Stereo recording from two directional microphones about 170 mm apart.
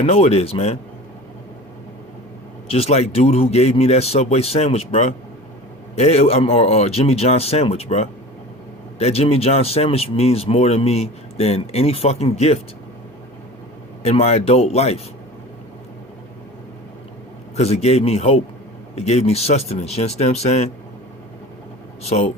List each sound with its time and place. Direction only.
0.0 s speech: 40° left (ahead or behind)
2.6 s speech: 35° left (ahead or behind)
14.0 s speech: 40° left (ahead or behind)
17.6 s speech: 35° left (ahead or behind)
22.0 s speech: 40° left (ahead or behind)